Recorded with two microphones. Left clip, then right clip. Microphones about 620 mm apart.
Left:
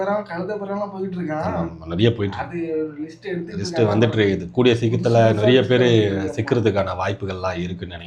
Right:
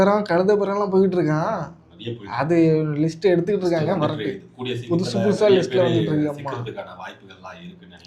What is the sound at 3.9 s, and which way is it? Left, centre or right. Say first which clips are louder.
Speech: left 6 dB; left.